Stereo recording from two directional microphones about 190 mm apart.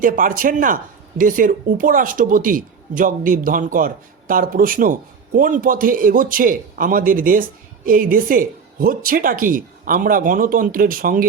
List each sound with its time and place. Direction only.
0.0 s speech: 45° right (ahead or behind)